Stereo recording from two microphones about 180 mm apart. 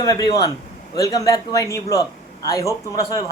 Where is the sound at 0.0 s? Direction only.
20° left (ahead or behind).